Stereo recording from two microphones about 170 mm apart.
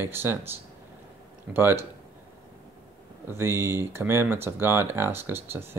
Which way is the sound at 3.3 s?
15° right (ahead or behind).